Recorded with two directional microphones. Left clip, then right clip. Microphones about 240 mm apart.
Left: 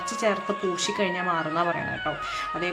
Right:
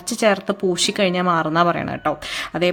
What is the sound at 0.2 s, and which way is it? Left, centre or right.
Speech, right.